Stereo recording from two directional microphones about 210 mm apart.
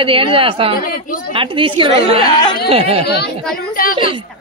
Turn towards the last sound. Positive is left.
turn(degrees=-25)  # may be behind; listen again after turning